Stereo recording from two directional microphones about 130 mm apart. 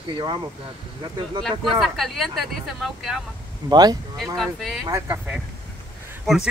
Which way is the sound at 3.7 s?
30° right (ahead or behind).